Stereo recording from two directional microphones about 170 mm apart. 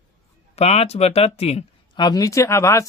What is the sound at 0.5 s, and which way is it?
Speech, 40° left (ahead or behind).